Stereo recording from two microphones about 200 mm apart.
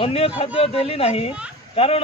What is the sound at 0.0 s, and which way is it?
A man's voice, 30° left (ahead or behind).